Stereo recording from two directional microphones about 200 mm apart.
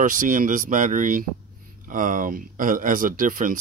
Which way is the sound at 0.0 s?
40° right (ahead or behind).